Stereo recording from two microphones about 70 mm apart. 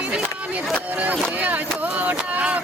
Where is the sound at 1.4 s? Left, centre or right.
Right.